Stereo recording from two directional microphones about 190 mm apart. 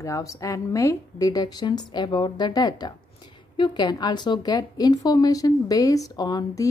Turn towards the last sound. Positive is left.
turn(degrees=20)  # may be behind; listen again after turning